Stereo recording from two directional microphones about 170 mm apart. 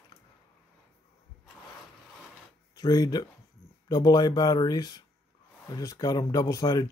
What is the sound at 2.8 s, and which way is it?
Speech, 20° left (ahead or behind).